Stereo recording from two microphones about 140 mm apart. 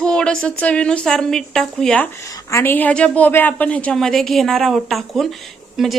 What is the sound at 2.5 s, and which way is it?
A woman's voice, 20° left (ahead or behind).